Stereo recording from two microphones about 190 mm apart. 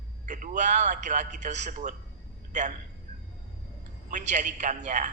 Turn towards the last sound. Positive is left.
turn(degrees=-40)  # may be behind; listen again after turning